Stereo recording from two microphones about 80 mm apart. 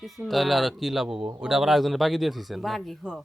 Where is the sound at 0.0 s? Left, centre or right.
Centre.